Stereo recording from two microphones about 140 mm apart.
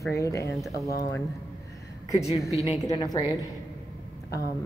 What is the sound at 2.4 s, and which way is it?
Speech, 20° right (ahead or behind).